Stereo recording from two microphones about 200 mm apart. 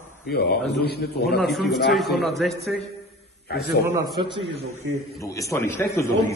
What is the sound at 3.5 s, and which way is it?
Speech, 50° left (ahead or behind).